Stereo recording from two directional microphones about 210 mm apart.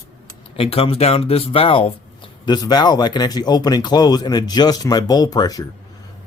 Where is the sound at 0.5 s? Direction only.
25° left (ahead or behind).